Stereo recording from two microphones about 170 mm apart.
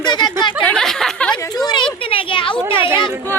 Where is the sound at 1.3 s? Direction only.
25° left (ahead or behind).